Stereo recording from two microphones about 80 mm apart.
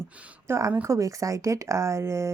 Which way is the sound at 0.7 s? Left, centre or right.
Right.